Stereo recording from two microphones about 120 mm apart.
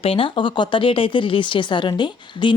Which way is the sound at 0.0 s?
50° left (ahead or behind).